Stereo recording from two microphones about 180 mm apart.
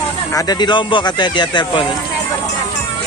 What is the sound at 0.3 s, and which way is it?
Speech, 20° left (ahead or behind).